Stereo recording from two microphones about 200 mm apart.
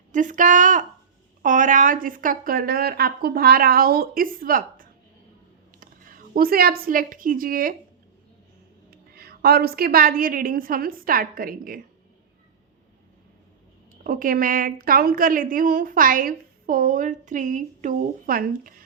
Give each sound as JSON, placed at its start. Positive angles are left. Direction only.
{"t": 0.1, "sound": "a woman's voice", "side_deg": -40}
{"t": 8.9, "sound": "a woman's voice", "side_deg": -50}
{"t": 14.0, "sound": "a woman's voice", "side_deg": -45}